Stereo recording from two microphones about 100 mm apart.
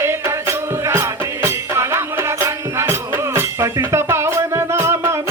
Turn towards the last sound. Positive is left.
turn(degrees=-25)  # may be behind; listen again after turning